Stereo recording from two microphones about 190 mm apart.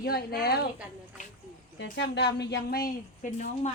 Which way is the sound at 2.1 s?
65° left (ahead or behind).